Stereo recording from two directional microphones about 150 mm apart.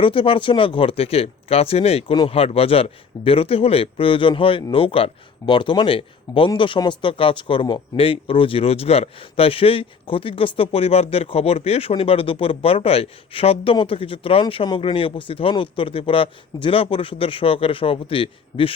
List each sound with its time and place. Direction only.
0.0 s a man's voice: 35° left (ahead or behind)